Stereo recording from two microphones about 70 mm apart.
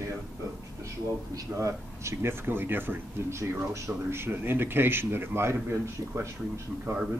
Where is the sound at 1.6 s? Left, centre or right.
Right.